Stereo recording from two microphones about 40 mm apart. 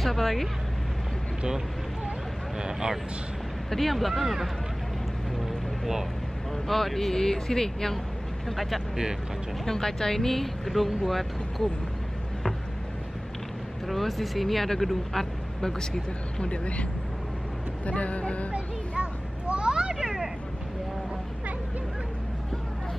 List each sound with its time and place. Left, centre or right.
0.0 s speech: centre
3.7 s speech: centre
5.4 s vehicle: centre
6.5 s speech: centre
8.5 s speech: centre
9.7 s speech: centre
13.8 s speech: centre
16.3 s speech: left
17.8 s speech: left
18.5 s a sound: right
20.0 s a sound: centre